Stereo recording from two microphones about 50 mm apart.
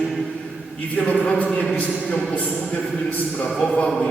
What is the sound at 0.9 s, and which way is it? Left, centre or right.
A man's voice, left.